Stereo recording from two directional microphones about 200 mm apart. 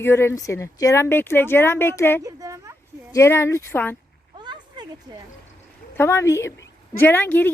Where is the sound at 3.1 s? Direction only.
15° left (ahead or behind).